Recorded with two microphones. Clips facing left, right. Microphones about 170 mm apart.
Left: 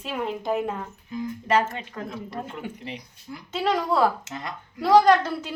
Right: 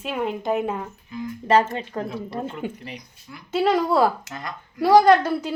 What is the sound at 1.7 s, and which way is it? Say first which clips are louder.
Speech: right 6 dB; 35° right (ahead or behind).